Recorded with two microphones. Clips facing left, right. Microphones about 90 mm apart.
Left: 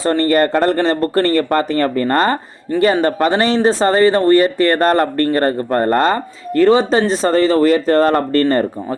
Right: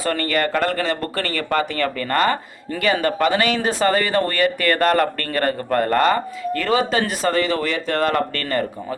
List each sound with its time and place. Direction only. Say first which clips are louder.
0.0 s speech: left 7 dB; 30° left (ahead or behind)